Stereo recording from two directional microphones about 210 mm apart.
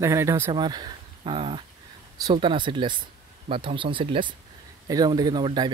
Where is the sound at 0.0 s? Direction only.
15° right (ahead or behind).